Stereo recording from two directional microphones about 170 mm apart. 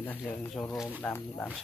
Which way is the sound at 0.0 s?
10° left (ahead or behind).